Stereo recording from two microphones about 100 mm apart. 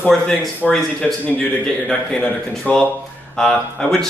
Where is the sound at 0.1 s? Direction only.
Centre (ahead or behind).